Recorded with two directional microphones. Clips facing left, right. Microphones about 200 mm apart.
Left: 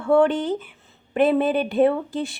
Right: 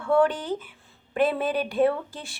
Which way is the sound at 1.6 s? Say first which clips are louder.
Left 4 dB; 25° left (ahead or behind).